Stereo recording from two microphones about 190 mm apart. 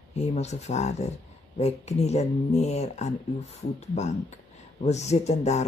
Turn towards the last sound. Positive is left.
turn(degrees=35)  # may be behind; listen again after turning